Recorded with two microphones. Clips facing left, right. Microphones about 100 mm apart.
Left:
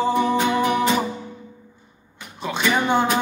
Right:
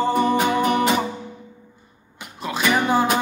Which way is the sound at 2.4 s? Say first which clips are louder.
Right 1 dB; 5° right (ahead or behind).